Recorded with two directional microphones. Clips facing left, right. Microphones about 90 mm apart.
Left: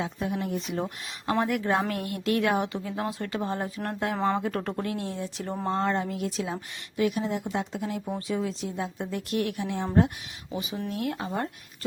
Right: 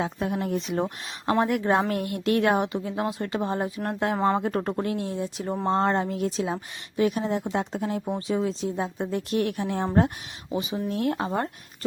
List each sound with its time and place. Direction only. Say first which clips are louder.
0.0 s speech: right 3 dB; 40° right (ahead or behind)
1.3 s speech: right 3 dB; 25° right (ahead or behind)
2.8 s speech: right 3 dB; 20° right (ahead or behind)
4.4 s speech: right 3 dB; 30° right (ahead or behind)
5.6 s speech: right 4 dB; 35° right (ahead or behind)
8.0 s speech: right 3 dB; 20° right (ahead or behind); by 9.8 s 40° right (ahead or behind)
10.5 s speech: right 4 dB; 25° right (ahead or behind)